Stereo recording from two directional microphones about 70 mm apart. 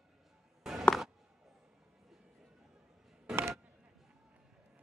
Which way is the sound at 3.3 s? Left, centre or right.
Right.